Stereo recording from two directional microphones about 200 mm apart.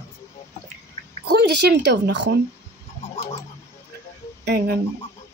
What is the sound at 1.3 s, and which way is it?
A child's voice, 55° right (ahead or behind).